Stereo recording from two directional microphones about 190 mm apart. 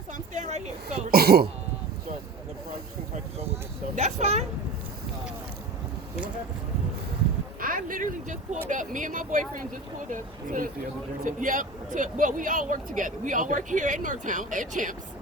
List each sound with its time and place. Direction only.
0.1 s a sound: 40° right (ahead or behind)
1.1 s speech: 55° right (ahead or behind)
3.3 s speech: 35° right (ahead or behind)
7.6 s speech: 45° right (ahead or behind)